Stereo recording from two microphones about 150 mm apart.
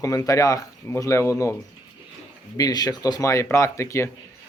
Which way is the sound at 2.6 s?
25° left (ahead or behind).